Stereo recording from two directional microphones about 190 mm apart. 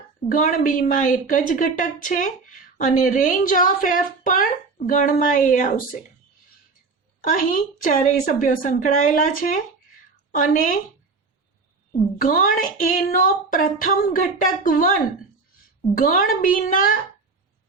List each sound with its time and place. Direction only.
0.3 s speech: 45° left (ahead or behind)
7.3 s speech: 45° left (ahead or behind)
12.2 s speech: 45° left (ahead or behind)
16.0 s speech: 45° left (ahead or behind)